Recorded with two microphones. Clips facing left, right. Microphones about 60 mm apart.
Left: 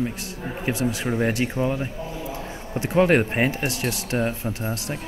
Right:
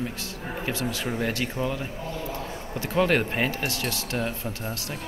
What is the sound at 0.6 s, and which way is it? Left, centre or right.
Speech, left.